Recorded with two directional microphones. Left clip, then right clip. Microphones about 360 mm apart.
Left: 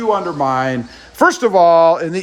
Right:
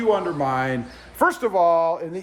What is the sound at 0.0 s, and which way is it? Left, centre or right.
A man's voice, centre.